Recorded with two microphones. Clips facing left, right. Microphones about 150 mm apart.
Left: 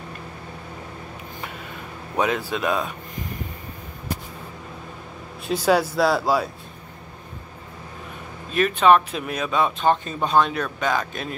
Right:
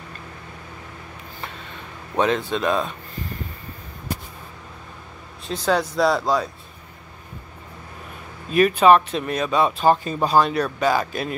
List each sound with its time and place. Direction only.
2.1 s speech: 10° left (ahead or behind)
5.5 s speech: 10° left (ahead or behind)
8.5 s speech: 5° right (ahead or behind)